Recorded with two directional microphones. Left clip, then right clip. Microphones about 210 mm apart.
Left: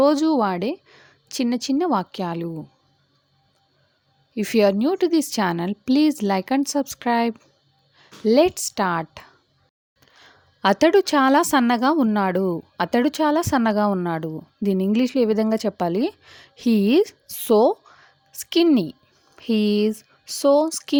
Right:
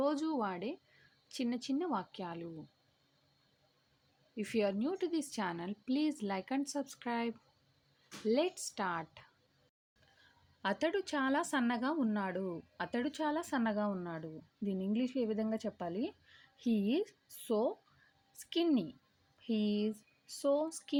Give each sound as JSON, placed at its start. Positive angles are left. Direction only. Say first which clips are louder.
{"t": 0.0, "sound": "speech", "louder": "left 17 dB", "side_deg": 50}
{"t": 4.4, "sound": "speech", "louder": "left 16 dB", "side_deg": 50}
{"t": 10.6, "sound": "speech", "louder": "left 19 dB", "side_deg": 50}